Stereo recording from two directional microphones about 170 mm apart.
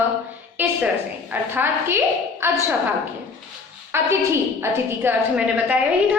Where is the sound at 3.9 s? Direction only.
15° right (ahead or behind).